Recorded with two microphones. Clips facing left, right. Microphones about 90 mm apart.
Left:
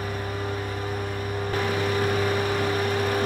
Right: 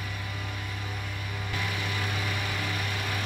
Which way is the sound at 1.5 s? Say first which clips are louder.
Left 9 dB; 45° left (ahead or behind).